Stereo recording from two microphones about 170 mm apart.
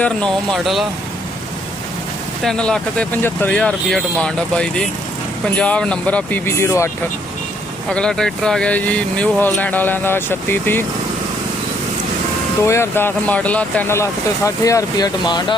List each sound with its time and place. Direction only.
0.0 s speech: 5° left (ahead or behind)
2.4 s speech: 5° left (ahead or behind)
7.9 s speech: 5° left (ahead or behind)
12.6 s speech: 15° left (ahead or behind)